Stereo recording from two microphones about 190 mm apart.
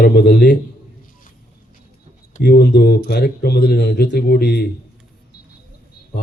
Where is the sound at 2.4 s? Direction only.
60° left (ahead or behind).